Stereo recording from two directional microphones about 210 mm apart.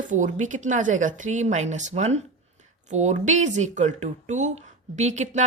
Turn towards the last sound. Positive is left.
turn(degrees=-35)  # may be behind; listen again after turning